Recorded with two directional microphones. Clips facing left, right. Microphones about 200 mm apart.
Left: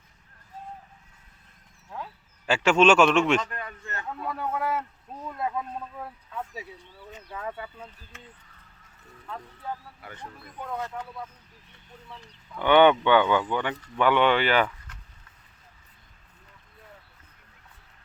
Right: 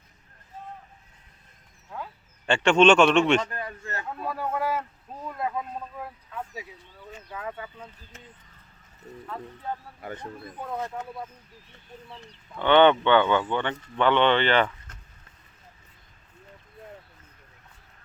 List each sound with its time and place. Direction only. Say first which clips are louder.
2.5 s a man's voice: right 1 dB; 5° left (ahead or behind)
3.5 s a sound: right 3 dB; 30° right (ahead or behind)
4.3 s a man's voice: right 1 dB; centre (ahead or behind)
5.2 s a sound: even; centre (ahead or behind)
7.6 s a man's voice: even; centre (ahead or behind)
10.2 s speech: right 3 dB; 20° right (ahead or behind)
12.5 s speech: even; 10° left (ahead or behind)